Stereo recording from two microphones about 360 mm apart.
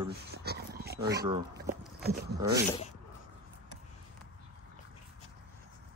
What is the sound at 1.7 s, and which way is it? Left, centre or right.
Dog, right.